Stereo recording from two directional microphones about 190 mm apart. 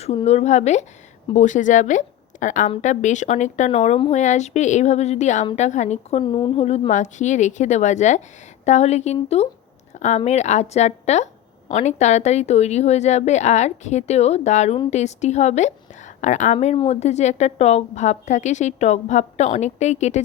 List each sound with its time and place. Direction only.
0.0 s a woman's voice: 35° left (ahead or behind)